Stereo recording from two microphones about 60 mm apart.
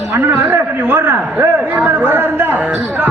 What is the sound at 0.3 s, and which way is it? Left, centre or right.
A man's voice, right.